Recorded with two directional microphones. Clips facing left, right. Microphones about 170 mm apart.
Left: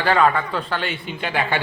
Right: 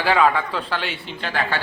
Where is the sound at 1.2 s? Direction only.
15° left (ahead or behind).